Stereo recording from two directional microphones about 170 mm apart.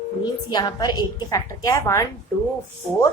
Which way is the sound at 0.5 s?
25° left (ahead or behind).